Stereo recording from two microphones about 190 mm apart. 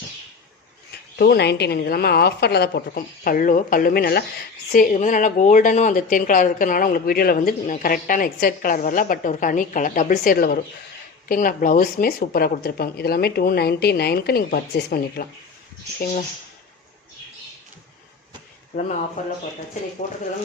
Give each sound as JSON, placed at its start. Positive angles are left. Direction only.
{"t": 0.9, "sound": "a woman's voice", "side_deg": 55}
{"t": 18.7, "sound": "a woman's voice", "side_deg": 45}